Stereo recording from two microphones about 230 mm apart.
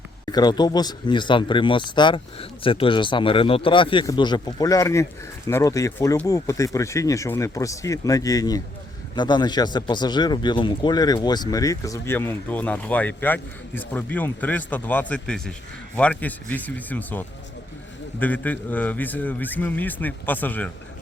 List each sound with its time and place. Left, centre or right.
0.3 s a man's voice: centre